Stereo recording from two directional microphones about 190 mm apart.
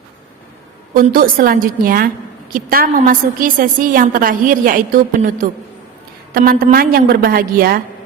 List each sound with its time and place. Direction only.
1.1 s a woman's voice: 50° right (ahead or behind)